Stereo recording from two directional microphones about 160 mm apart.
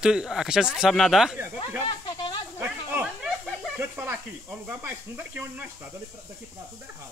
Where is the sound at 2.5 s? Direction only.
10° right (ahead or behind).